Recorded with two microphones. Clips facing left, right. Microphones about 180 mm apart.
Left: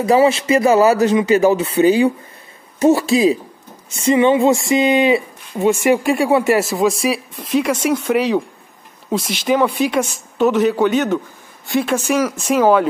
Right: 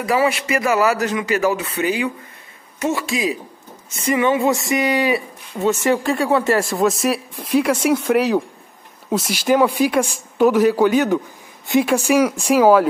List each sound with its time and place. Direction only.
0.0 s speech: 25° left (ahead or behind)
5.7 s a man's voice: 10° left (ahead or behind); by 11.9 s 15° right (ahead or behind)
12.4 s speech: centre (ahead or behind)